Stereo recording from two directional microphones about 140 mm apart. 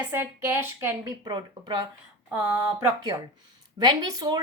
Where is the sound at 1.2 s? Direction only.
30° right (ahead or behind).